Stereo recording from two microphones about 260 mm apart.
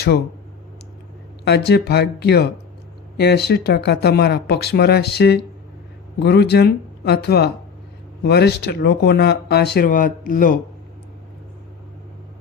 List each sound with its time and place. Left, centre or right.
1.5 s speech: left